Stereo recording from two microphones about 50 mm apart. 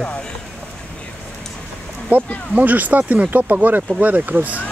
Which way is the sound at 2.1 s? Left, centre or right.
Right.